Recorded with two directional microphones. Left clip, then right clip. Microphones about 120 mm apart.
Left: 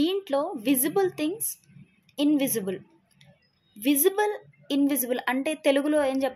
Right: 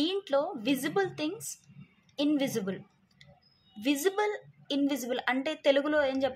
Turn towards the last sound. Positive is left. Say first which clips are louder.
# left 3 dB
turn(degrees=35)  # may be behind; listen again after turning